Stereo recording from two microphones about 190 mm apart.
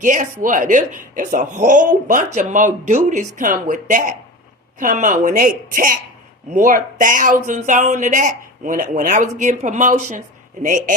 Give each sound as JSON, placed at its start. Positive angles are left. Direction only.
{"t": 0.0, "sound": "speech", "side_deg": -45}